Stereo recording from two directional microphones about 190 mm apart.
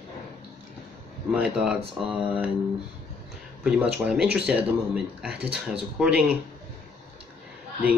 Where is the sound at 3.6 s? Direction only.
5° right (ahead or behind).